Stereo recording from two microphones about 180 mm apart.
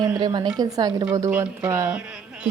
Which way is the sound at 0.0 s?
20° right (ahead or behind).